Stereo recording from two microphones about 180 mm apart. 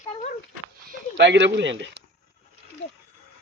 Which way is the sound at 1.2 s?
80° right.